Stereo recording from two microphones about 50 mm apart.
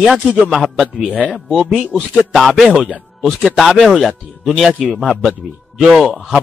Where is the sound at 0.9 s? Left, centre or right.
Right.